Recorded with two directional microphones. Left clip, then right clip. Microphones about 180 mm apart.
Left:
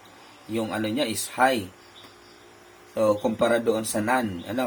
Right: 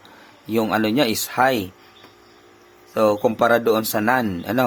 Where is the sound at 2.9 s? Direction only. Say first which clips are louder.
Right 5 dB; 55° right (ahead or behind).